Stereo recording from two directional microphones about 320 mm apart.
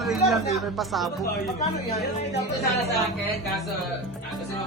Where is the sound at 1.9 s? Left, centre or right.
Left.